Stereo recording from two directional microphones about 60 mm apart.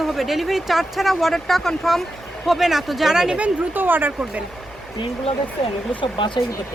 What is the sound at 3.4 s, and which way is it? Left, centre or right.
Speech, right.